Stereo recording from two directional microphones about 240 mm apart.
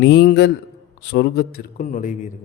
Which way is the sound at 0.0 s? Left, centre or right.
Left.